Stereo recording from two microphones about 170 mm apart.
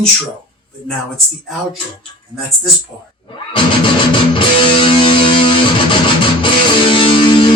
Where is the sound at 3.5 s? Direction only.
30° left (ahead or behind).